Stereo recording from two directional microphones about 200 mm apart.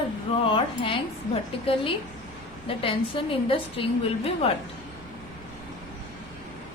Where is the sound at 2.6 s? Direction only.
25° left (ahead or behind).